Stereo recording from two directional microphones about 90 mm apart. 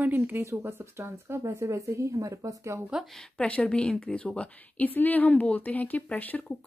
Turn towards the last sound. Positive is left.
turn(degrees=15)  # may be behind; listen again after turning